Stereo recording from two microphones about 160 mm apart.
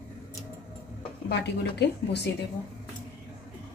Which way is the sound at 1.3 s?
90° left.